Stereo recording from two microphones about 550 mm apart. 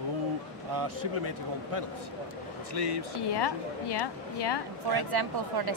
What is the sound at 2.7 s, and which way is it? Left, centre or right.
Speech, right.